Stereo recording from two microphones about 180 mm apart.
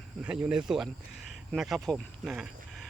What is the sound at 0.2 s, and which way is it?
Speech, 5° right (ahead or behind).